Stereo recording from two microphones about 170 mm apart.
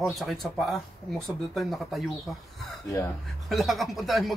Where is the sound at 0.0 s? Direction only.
Centre (ahead or behind).